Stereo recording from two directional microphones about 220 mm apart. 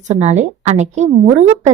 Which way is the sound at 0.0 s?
30° right (ahead or behind).